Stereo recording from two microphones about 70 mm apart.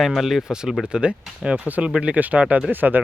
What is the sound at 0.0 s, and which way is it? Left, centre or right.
Speech, centre.